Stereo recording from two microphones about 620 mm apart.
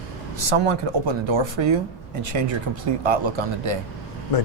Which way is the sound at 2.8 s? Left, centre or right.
Right.